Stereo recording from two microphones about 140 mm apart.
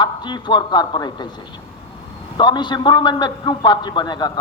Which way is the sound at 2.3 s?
35° left (ahead or behind).